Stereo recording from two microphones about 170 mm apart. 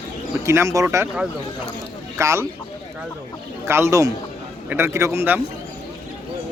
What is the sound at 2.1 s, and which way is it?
Speech, 15° right (ahead or behind).